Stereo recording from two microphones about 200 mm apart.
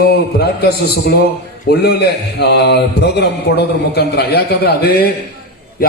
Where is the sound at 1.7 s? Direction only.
50° left (ahead or behind).